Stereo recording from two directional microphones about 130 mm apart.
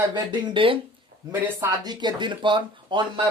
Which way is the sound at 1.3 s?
25° right (ahead or behind).